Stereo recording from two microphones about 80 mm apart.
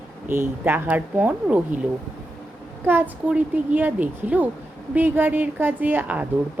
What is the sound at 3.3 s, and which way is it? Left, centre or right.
Speech, right.